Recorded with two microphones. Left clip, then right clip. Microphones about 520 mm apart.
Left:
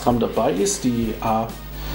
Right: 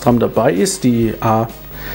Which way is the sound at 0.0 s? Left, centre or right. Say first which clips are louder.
Right 6 dB; right.